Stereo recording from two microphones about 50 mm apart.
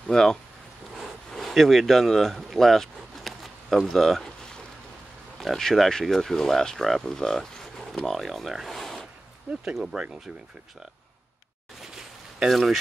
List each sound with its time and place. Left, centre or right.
0.1 s speech: centre
0.9 s a sound: centre
5.4 s speech: centre
9.5 s speech: right
12.4 s speech: centre